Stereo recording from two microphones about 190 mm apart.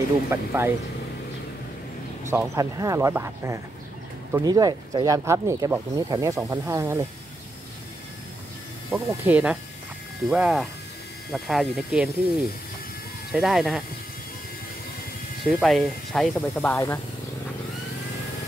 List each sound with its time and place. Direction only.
0.3 s speech: 15° right (ahead or behind)
2.3 s speech: 15° right (ahead or behind)
8.9 s speech: 10° right (ahead or behind)
13.3 s speech: centre (ahead or behind)
15.4 s speech: centre (ahead or behind)